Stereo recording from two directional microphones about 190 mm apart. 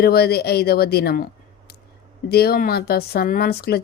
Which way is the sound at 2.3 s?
55° left (ahead or behind).